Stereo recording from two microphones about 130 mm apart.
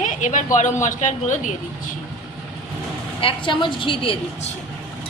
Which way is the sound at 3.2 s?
40° left (ahead or behind).